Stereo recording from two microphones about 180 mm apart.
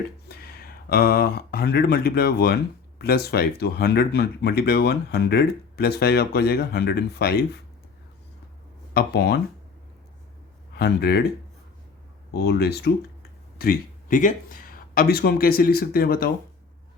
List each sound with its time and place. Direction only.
0.3 s speech: 60° left (ahead or behind)
8.9 s speech: 65° left (ahead or behind)
10.8 s speech: 65° left (ahead or behind)
12.3 s speech: 60° left (ahead or behind)
13.6 s speech: 50° left (ahead or behind)